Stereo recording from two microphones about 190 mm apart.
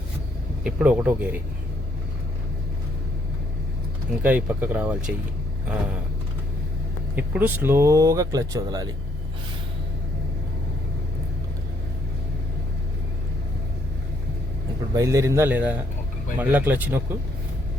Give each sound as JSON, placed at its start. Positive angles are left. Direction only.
{"t": 0.6, "sound": "speech", "side_deg": -5}
{"t": 4.2, "sound": "speech", "side_deg": -10}
{"t": 7.2, "sound": "speech", "side_deg": -10}
{"t": 14.9, "sound": "speech", "side_deg": -15}